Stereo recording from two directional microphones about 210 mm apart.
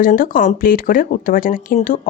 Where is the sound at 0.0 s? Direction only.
40° left (ahead or behind).